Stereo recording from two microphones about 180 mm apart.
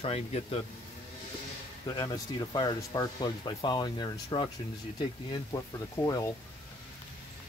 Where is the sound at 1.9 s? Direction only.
25° left (ahead or behind).